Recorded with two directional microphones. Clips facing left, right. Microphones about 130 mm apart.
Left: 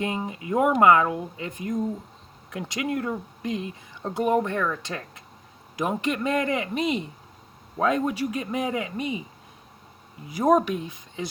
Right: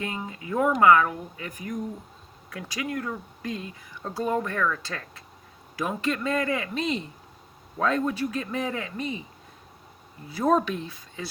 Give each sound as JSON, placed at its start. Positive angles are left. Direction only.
{"t": 0.0, "sound": "speech", "side_deg": 20}
{"t": 10.2, "sound": "speech", "side_deg": 15}